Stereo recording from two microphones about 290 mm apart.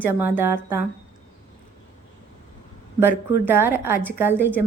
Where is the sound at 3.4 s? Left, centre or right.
Centre.